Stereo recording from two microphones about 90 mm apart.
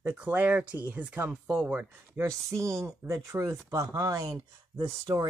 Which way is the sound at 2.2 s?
35° right (ahead or behind).